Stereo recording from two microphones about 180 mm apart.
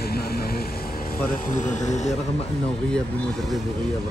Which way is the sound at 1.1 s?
50° left (ahead or behind).